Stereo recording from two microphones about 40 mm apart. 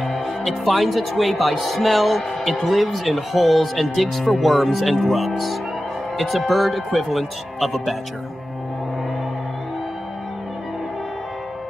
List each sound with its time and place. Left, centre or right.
0.0 s speech: centre